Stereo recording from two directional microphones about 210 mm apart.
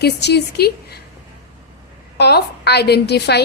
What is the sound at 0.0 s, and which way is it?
Speech, 55° left (ahead or behind).